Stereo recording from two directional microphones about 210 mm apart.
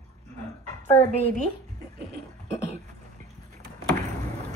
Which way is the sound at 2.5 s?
30° left (ahead or behind).